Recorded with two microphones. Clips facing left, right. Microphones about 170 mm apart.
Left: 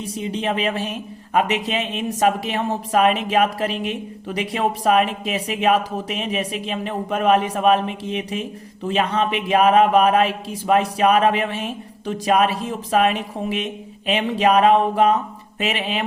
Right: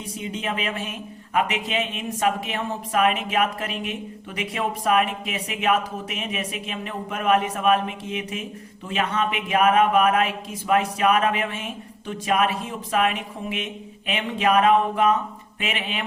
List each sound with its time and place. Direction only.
0.0 s speech: 35° left (ahead or behind)